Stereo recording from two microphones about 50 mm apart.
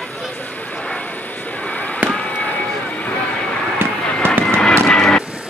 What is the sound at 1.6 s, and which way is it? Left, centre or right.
Fireworks, left.